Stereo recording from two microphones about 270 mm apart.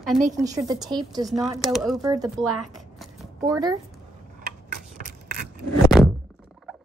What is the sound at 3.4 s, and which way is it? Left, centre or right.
Speech, centre.